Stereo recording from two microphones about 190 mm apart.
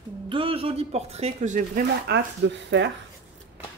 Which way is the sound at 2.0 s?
65° right (ahead or behind).